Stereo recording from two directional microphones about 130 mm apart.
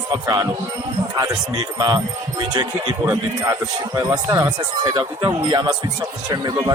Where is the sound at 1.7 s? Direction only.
30° right (ahead or behind).